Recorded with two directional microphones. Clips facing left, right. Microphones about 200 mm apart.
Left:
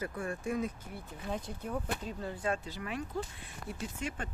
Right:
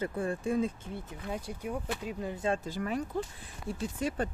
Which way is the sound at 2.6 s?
45° right (ahead or behind).